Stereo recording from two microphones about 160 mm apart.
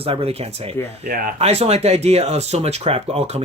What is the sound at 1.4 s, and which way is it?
Speech, 40° right (ahead or behind).